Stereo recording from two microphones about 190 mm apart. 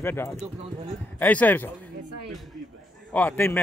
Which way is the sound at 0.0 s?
15° left (ahead or behind).